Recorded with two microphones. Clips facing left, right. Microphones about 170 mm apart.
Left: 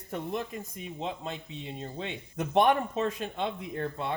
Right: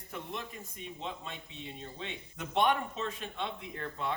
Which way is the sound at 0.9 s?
40° left (ahead or behind).